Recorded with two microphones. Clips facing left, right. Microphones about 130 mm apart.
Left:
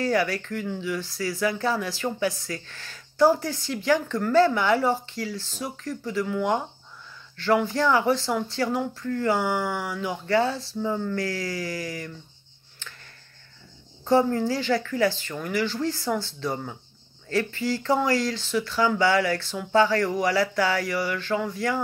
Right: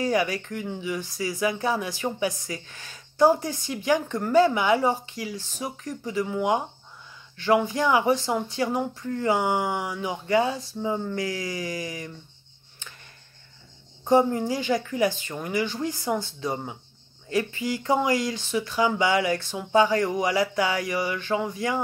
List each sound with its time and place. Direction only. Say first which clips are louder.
0.0 s speech: even; 20° right (ahead or behind)
14.0 s speech: even; 20° right (ahead or behind)